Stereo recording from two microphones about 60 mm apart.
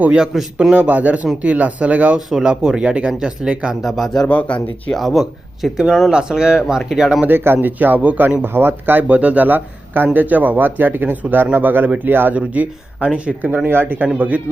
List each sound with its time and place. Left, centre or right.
0.2 s speech: centre
0.7 s speech: right
2.1 s speech: centre
3.8 s speech: centre
4.3 s speech: left
4.9 s speech: centre
6.1 s speech: centre
7.3 s speech: right
9.0 s speech: right
12.4 s speech: centre
13.7 s speech: right